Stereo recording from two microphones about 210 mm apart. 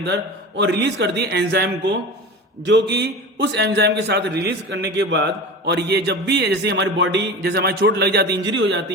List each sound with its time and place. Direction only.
0.0 s a man's voice: 55° right (ahead or behind)